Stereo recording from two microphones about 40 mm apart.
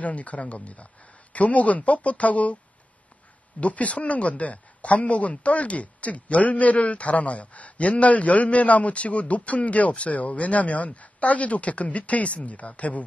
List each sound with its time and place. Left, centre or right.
0.0 s speech: left
3.6 s speech: left